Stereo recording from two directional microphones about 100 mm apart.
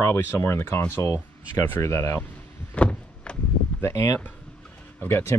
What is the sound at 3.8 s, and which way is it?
Speech, 25° left (ahead or behind).